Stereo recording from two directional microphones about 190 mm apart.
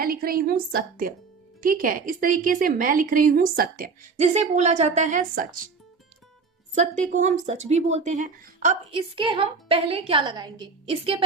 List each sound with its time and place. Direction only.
0.0 s a woman's voice: 50° right (ahead or behind)
6.7 s speech: 40° right (ahead or behind)